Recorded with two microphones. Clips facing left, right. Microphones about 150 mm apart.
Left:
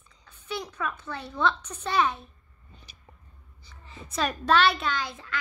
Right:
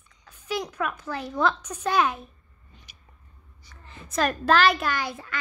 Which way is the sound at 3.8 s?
Centre (ahead or behind).